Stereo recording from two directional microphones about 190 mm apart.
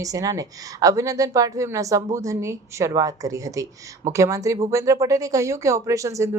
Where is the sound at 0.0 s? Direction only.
15° right (ahead or behind).